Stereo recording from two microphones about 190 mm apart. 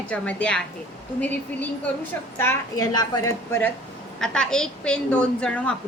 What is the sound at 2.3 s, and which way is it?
A woman's voice, 10° left (ahead or behind).